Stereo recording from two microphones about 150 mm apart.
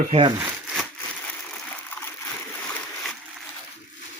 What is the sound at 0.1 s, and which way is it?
Speech, 35° right (ahead or behind).